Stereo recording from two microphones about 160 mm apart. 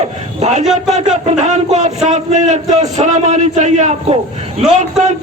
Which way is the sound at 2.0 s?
50° right (ahead or behind).